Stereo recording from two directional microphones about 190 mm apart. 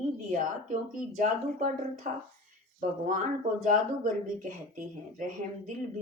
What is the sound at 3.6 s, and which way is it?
Speech, 40° right (ahead or behind).